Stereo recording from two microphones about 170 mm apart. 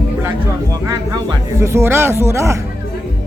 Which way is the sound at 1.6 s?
15° right (ahead or behind).